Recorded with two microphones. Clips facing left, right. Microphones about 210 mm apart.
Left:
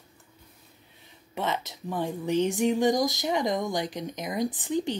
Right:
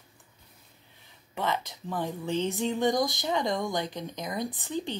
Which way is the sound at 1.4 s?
20° left (ahead or behind).